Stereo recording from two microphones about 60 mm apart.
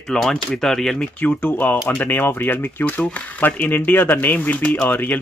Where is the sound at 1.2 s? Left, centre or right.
Left.